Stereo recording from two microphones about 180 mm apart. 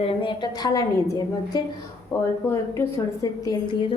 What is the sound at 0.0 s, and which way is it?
A woman's voice, 30° left (ahead or behind).